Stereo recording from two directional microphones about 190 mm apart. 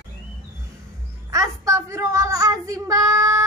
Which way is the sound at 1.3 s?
15° right (ahead or behind).